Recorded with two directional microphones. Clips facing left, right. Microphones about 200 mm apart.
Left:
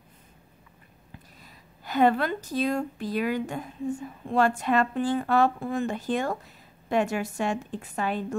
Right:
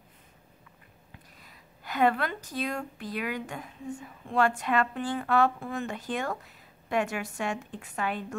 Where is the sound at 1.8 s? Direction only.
30° left (ahead or behind).